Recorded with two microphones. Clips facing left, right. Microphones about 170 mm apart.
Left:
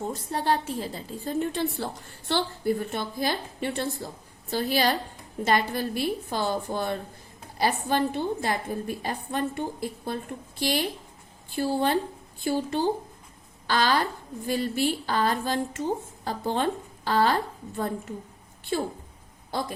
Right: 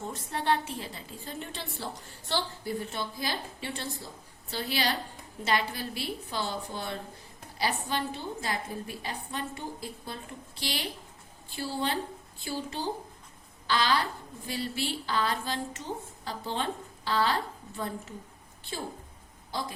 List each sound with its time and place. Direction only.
0.0 s a woman's voice: 35° left (ahead or behind)